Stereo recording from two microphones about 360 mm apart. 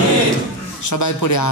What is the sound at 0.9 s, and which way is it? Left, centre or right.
Speech, left.